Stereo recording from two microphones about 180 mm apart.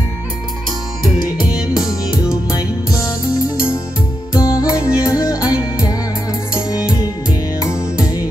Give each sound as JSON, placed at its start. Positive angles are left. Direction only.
{"t": 1.8, "sound": "music", "side_deg": 20}
{"t": 4.7, "sound": "music", "side_deg": -5}